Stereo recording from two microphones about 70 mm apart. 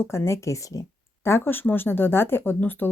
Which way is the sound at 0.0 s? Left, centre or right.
Left.